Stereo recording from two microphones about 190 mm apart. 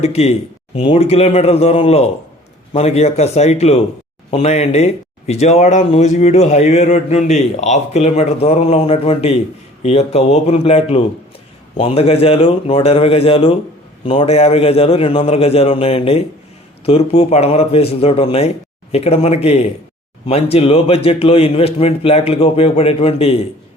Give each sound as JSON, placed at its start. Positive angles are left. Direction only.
{"t": 0.0, "sound": "speech", "side_deg": 35}